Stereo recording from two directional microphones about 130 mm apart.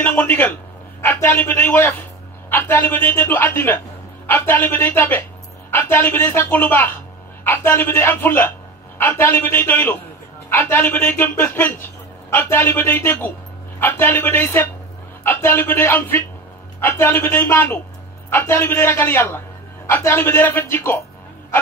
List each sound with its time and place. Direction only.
0.0 s a man's voice: 15° left (ahead or behind)